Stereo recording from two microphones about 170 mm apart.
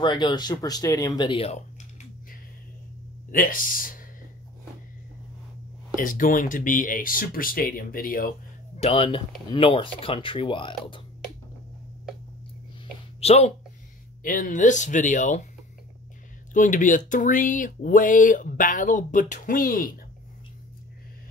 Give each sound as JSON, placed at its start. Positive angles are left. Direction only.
{"t": 0.0, "sound": "speech", "side_deg": 25}
{"t": 3.3, "sound": "speech", "side_deg": 55}
{"t": 5.9, "sound": "speech", "side_deg": 55}
{"t": 8.7, "sound": "speech", "side_deg": 35}
{"t": 13.2, "sound": "speech", "side_deg": 40}
{"t": 14.2, "sound": "speech", "side_deg": 50}
{"t": 16.5, "sound": "speech", "side_deg": 50}